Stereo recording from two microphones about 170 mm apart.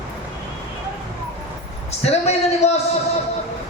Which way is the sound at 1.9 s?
40° left (ahead or behind).